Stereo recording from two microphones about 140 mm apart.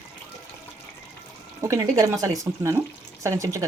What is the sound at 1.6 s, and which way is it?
A woman's voice, 20° right (ahead or behind).